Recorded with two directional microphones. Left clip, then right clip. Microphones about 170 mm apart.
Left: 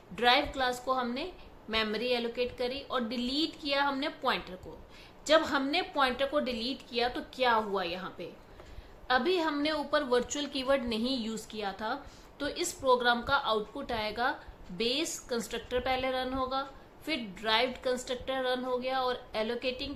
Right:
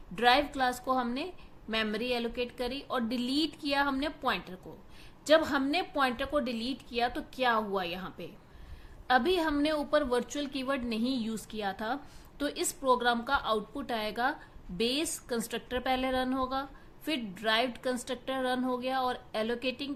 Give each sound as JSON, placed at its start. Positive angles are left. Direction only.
{"t": 0.2, "sound": "a woman's voice", "side_deg": -45}